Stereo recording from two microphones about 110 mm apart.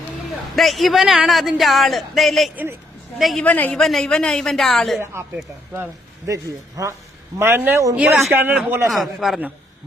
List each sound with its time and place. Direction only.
0.5 s a man's voice: centre (ahead or behind)
3.4 s a man's voice: 15° left (ahead or behind)
3.8 s a man's voice: 5° left (ahead or behind)
5.2 s speech: 25° right (ahead or behind)
7.9 s speech: 15° right (ahead or behind)
8.9 s a man's voice: centre (ahead or behind)